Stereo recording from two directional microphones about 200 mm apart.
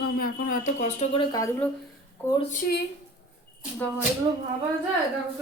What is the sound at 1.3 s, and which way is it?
Speech, 15° left (ahead or behind).